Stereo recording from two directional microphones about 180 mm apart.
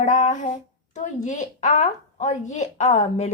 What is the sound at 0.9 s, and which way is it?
A woman's voice, 40° left (ahead or behind).